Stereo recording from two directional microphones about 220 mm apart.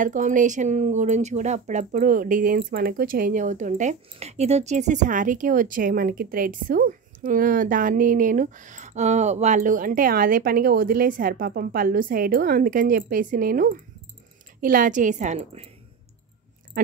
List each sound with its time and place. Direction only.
0.0 s speech: 35° right (ahead or behind)